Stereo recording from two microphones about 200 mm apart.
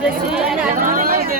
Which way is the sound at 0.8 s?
45° right (ahead or behind).